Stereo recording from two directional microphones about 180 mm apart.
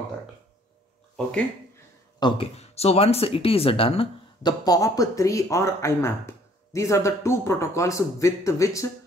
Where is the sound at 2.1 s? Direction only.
25° left (ahead or behind).